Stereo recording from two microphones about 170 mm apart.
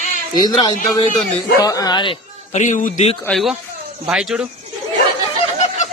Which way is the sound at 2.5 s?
45° left (ahead or behind).